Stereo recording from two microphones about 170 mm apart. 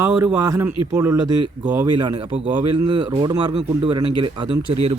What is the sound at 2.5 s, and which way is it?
A man's voice, 25° right (ahead or behind).